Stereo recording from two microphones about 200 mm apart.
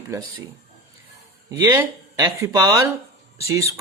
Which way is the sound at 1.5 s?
15° right (ahead or behind).